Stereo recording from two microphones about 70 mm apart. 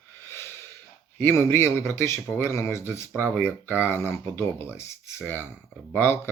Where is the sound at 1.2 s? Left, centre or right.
Left.